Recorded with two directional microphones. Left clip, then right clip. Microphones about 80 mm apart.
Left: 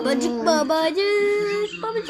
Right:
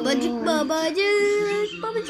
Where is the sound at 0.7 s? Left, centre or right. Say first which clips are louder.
Left 3 dB; left.